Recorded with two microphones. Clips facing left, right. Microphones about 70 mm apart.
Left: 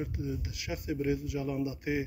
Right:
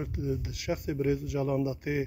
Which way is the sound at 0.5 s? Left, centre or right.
Right.